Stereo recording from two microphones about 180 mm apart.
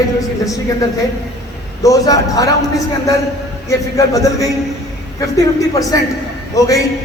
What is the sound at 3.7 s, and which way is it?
Speech, 20° left (ahead or behind).